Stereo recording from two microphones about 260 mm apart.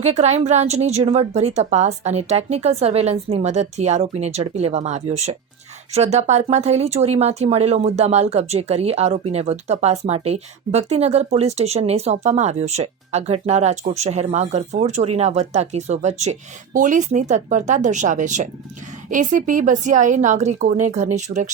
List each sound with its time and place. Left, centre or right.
0.0 s speech: right